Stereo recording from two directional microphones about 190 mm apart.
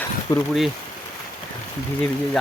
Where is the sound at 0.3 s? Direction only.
20° left (ahead or behind).